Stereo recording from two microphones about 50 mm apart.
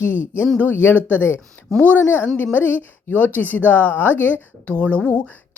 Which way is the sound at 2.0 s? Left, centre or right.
Left.